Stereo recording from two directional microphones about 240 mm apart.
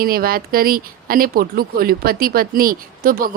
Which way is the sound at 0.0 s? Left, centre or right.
Right.